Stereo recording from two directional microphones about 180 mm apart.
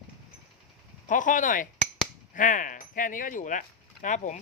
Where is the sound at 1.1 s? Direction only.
45° left (ahead or behind).